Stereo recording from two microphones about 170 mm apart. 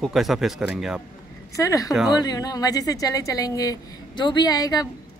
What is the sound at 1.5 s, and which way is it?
A woman's voice, 20° left (ahead or behind).